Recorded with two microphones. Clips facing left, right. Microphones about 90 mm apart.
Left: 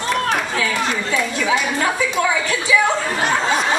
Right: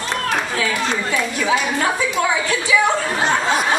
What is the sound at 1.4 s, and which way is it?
Speech, 15° right (ahead or behind).